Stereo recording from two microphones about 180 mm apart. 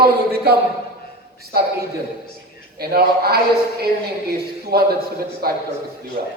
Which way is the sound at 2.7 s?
60° right (ahead or behind).